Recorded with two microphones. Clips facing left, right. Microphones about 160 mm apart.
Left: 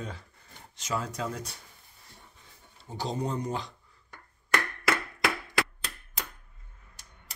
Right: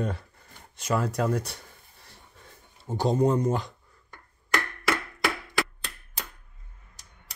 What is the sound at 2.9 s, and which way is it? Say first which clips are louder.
Speech: right 9 dB; 50° right (ahead or behind).